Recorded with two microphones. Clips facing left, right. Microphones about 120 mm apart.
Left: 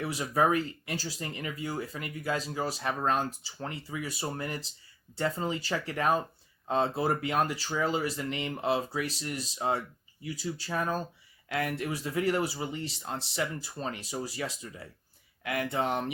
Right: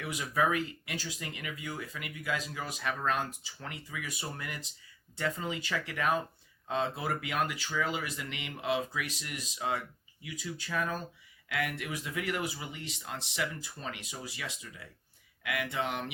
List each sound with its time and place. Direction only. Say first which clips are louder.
0.0 s speech: left 3 dB; 35° left (ahead or behind)